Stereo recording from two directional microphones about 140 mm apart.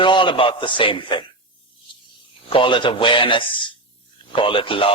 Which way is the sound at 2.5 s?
35° left (ahead or behind).